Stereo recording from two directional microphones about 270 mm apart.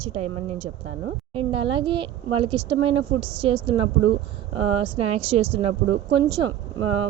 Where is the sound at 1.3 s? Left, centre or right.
Centre.